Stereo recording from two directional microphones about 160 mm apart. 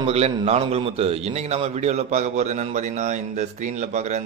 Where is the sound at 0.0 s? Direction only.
40° right (ahead or behind).